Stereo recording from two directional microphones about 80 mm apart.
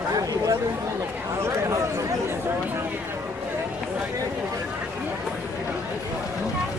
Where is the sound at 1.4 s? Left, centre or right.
Right.